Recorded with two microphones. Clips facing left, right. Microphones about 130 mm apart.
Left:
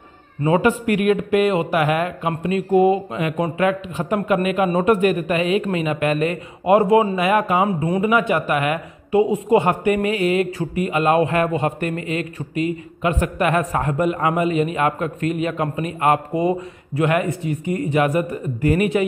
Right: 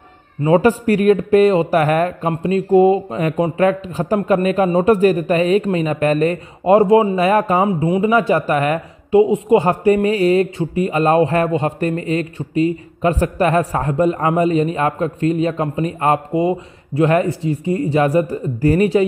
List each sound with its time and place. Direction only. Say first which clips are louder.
0.4 s speech: right 4 dB; 35° right (ahead or behind)
7.6 s speech: right 3 dB; 25° right (ahead or behind)
9.1 s speech: right 4 dB; 25° right (ahead or behind)